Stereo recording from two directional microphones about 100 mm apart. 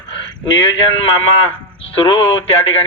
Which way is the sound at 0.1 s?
55° left (ahead or behind).